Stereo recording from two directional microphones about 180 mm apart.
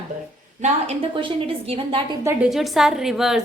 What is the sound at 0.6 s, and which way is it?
A woman's voice, 35° right (ahead or behind).